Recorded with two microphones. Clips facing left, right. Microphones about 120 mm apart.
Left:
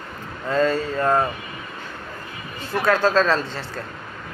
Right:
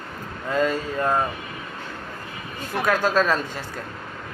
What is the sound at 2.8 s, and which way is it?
Speech, 10° right (ahead or behind).